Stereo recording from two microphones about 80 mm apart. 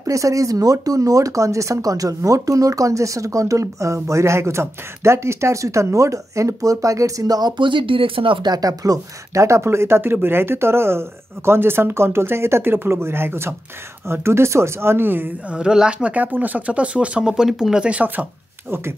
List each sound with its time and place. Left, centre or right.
0.0 s speech: right
7.5 s speech: right
15.5 s speech: centre